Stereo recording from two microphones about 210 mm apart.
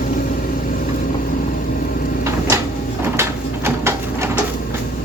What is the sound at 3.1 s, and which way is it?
Bird, 10° right (ahead or behind).